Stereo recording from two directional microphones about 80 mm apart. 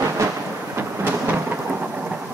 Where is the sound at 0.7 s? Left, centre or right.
Right.